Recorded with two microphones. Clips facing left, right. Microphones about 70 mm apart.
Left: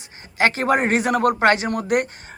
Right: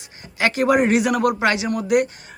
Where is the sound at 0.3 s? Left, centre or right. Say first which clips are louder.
Right 1 dB; left.